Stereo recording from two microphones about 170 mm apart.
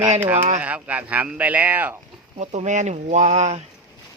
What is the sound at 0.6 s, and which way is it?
Speech, 10° right (ahead or behind).